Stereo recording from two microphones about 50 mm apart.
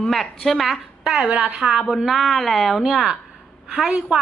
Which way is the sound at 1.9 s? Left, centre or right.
Centre.